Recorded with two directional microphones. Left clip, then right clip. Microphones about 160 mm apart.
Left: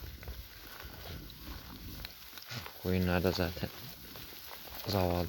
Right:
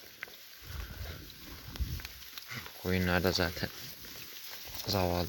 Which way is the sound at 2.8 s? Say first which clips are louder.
Right 2 dB; centre (ahead or behind).